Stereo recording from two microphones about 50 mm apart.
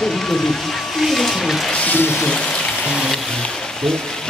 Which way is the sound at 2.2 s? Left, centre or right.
Centre.